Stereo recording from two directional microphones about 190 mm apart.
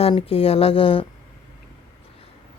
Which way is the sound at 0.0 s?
30° left (ahead or behind).